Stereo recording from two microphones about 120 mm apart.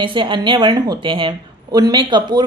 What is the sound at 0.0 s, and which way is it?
A woman's voice, 45° right (ahead or behind).